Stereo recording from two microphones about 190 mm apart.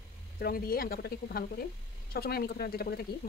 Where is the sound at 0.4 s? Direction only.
50° left (ahead or behind).